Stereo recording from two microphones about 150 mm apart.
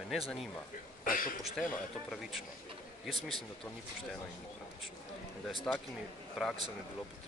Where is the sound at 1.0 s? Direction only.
65° left (ahead or behind).